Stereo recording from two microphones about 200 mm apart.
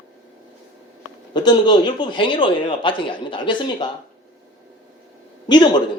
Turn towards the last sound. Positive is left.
turn(degrees=20)  # may be behind; listen again after turning